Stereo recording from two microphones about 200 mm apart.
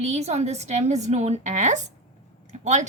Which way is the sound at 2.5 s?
35° right (ahead or behind).